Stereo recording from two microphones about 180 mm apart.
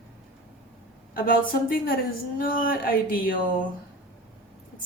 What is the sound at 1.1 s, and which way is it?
Speech, 55° left (ahead or behind).